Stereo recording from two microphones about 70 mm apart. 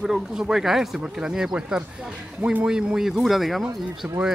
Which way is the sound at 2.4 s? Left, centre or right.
Right.